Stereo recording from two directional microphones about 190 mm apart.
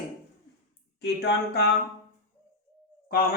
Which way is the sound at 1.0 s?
60° left (ahead or behind).